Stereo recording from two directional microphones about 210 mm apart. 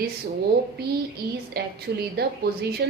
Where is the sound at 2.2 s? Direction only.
50° right (ahead or behind).